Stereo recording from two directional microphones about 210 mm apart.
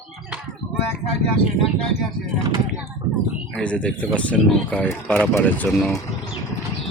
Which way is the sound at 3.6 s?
5° left (ahead or behind).